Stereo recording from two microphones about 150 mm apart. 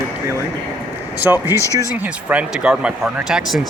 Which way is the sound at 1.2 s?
15° right (ahead or behind).